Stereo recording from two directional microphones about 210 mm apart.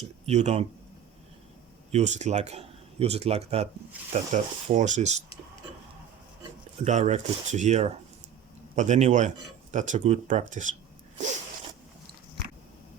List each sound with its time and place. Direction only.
0.0 s speech: 30° right (ahead or behind)
1.9 s speech: 35° right (ahead or behind)
6.8 s speech: 35° right (ahead or behind)